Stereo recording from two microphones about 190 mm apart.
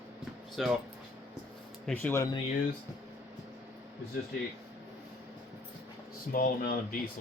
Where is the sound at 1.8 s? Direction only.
10° left (ahead or behind).